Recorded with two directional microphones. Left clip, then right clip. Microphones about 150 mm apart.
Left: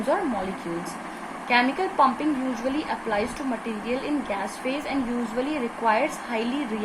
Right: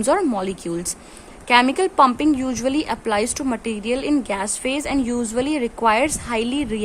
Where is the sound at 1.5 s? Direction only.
50° right (ahead or behind).